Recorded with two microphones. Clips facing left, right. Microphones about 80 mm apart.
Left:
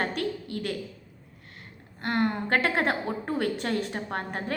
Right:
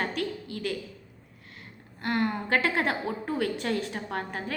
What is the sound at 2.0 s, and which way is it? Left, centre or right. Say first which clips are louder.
A woman's voice: left 1 dB; left.